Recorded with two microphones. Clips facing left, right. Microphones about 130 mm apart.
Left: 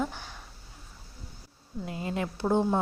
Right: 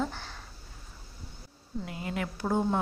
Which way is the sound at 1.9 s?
25° left (ahead or behind).